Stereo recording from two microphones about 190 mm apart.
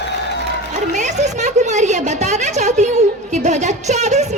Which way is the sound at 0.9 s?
40° right (ahead or behind).